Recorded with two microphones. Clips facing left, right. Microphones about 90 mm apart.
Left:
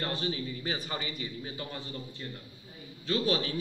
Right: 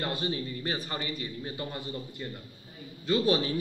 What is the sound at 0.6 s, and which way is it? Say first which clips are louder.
Speech: right 2 dB; 5° left (ahead or behind).